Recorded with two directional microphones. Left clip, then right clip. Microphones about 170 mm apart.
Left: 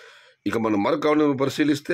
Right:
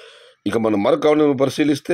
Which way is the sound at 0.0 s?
15° right (ahead or behind).